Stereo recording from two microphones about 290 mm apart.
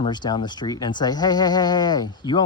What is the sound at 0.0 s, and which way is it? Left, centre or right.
Speech, centre.